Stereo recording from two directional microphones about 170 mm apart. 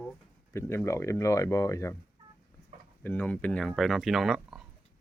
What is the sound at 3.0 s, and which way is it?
Speech, 10° left (ahead or behind).